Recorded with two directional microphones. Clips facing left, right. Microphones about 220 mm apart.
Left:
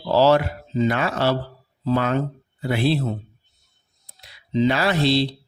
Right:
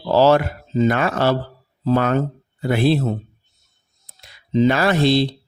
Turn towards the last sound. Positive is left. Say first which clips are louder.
# right 3 dB
turn(degrees=-50)  # may be behind; listen again after turning